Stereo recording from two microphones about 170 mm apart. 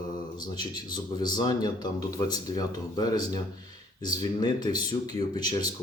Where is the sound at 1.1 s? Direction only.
25° left (ahead or behind).